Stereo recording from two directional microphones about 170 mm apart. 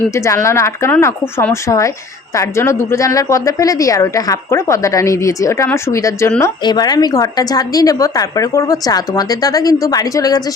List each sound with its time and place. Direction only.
0.1 s speech: 15° left (ahead or behind)